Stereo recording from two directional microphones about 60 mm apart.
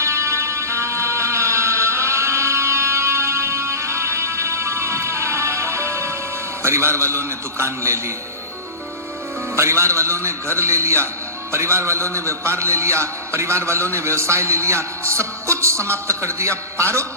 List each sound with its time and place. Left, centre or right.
0.0 s music: right
6.6 s a man's voice: right
9.6 s a man's voice: right